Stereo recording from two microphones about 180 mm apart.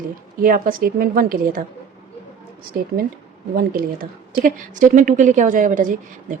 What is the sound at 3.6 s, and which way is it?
A woman's voice, 50° right (ahead or behind).